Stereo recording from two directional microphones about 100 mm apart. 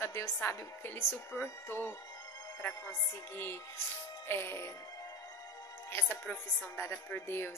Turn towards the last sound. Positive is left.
turn(degrees=25)  # may be behind; listen again after turning